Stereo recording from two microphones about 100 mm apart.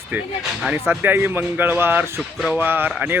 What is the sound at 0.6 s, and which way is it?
Speech, 15° right (ahead or behind).